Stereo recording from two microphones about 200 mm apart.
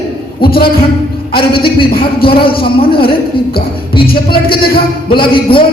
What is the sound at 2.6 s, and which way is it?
Speech, 25° left (ahead or behind).